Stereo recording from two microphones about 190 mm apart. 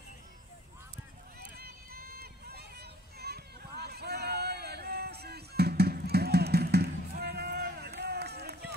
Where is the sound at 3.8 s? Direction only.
60° right (ahead or behind).